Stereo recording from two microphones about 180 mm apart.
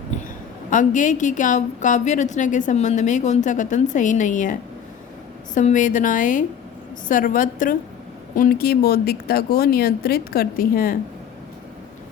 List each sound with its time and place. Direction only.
0.7 s a woman's voice: 45° left (ahead or behind)
5.5 s a woman's voice: 45° left (ahead or behind)